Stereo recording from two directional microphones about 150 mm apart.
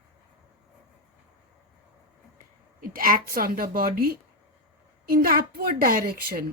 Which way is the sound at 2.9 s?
70° right (ahead or behind).